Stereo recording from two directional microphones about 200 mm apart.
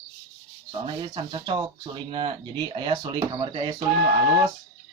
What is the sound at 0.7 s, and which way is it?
Speech, 25° right (ahead or behind).